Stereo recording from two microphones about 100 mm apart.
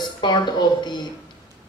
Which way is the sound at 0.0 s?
45° left (ahead or behind).